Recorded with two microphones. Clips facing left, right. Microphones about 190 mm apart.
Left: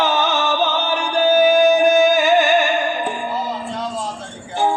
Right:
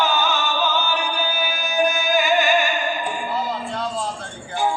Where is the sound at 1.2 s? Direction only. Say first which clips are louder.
Left 14 dB; 45° left (ahead or behind).